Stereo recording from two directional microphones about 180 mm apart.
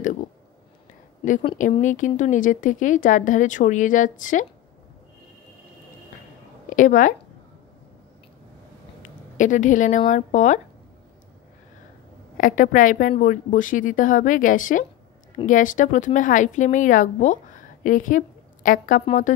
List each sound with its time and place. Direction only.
1.6 s a woman's voice: 45° left (ahead or behind)
6.7 s speech: 45° left (ahead or behind)
9.4 s a woman's voice: 45° left (ahead or behind)
12.4 s a woman's voice: 50° left (ahead or behind)